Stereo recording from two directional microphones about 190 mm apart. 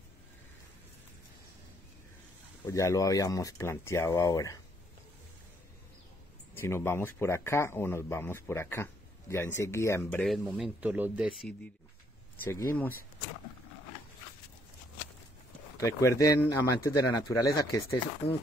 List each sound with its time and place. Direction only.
2.6 s speech: 15° left (ahead or behind)
6.5 s speech: 10° left (ahead or behind)
10.2 s speech: centre (ahead or behind)
12.4 s speech: 10° left (ahead or behind)
15.8 s speech: 15° left (ahead or behind)